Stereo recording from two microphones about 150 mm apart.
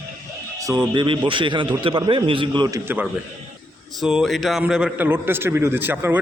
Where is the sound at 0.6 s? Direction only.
25° right (ahead or behind).